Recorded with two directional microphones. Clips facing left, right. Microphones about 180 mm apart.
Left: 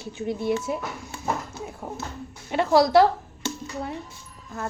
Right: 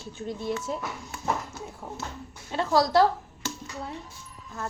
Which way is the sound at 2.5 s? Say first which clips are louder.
Left 5 dB; 15° left (ahead or behind).